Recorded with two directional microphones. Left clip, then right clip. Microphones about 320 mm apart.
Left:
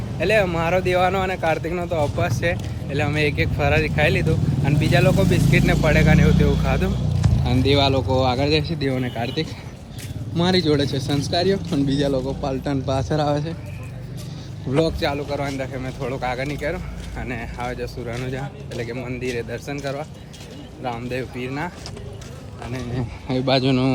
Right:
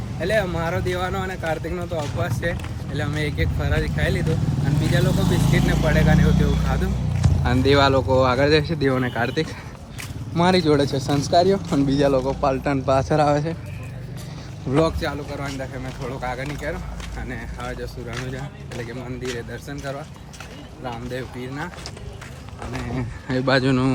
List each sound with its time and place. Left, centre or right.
0.2 s speech: centre
10.3 s speech: centre
10.8 s speech: centre
11.5 s speech: centre
12.4 s speech: centre
14.7 s speech: centre
14.9 s speech: centre
23.3 s speech: centre